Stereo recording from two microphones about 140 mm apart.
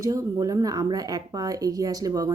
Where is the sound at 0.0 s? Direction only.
25° right (ahead or behind).